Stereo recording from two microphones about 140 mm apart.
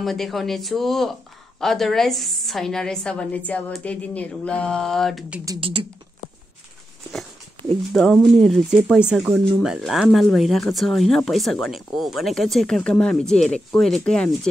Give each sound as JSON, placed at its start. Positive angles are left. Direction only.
{"t": 0.0, "sound": "a woman's voice", "side_deg": 0}
{"t": 5.6, "sound": "speech", "side_deg": -40}
{"t": 7.9, "sound": "a woman's voice", "side_deg": 5}